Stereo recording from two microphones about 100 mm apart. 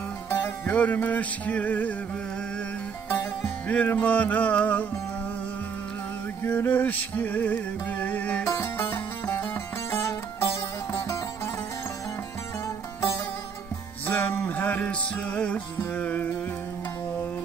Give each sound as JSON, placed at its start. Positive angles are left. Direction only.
{"t": 0.3, "sound": "music", "side_deg": 20}
{"t": 3.1, "sound": "music", "side_deg": 20}
{"t": 6.4, "sound": "music", "side_deg": 20}
{"t": 8.5, "sound": "music", "side_deg": 25}
{"t": 14.0, "sound": "music", "side_deg": 20}